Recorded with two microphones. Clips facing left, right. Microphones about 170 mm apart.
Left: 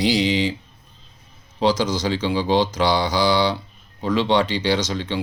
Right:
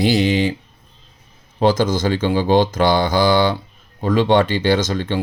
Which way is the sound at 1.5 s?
55° right (ahead or behind).